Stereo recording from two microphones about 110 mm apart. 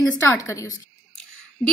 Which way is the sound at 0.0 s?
30° left (ahead or behind).